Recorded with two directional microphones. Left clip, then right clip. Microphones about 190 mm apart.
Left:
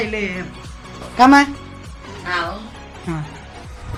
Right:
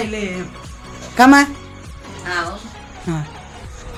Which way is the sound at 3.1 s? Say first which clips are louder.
Right 2 dB; 20° right (ahead or behind).